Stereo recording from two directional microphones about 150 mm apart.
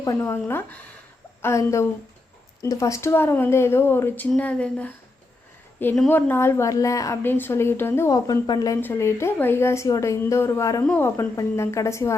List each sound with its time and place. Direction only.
0.0 s a woman's voice: 20° left (ahead or behind)